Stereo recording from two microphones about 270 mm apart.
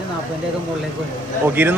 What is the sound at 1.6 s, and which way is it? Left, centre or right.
Speech, centre.